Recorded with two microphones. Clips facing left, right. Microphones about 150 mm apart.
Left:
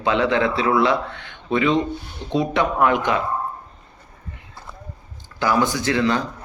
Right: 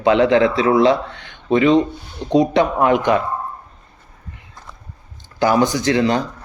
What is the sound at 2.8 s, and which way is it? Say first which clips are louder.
Speech: right 2 dB; 30° right (ahead or behind).